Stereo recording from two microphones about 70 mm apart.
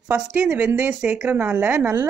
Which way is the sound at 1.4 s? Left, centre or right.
Right.